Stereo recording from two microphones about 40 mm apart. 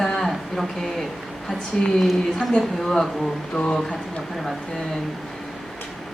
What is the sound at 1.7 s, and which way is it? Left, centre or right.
A woman's voice, centre.